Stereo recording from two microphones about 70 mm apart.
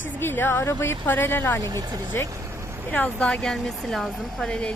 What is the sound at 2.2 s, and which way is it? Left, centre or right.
Vehicle, right.